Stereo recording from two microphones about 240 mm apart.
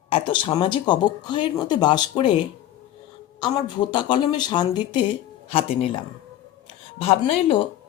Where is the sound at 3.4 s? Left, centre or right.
Centre.